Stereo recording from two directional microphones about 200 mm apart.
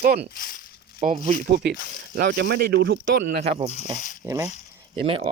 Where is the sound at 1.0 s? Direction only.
35° right (ahead or behind).